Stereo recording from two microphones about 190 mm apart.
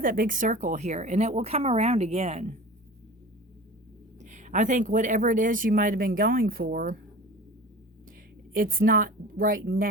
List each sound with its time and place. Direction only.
0.0 s speech: 45° right (ahead or behind)
4.2 s speech: 40° right (ahead or behind)
8.5 s speech: 50° right (ahead or behind)